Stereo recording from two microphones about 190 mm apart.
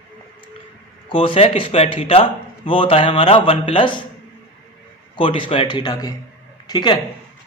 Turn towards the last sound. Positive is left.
turn(degrees=20)  # may be behind; listen again after turning